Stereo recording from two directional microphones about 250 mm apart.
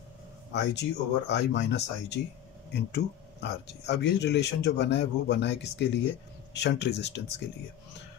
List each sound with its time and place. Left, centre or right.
0.5 s speech: left